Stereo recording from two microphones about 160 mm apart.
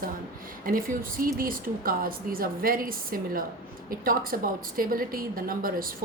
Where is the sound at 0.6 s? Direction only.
60° right (ahead or behind).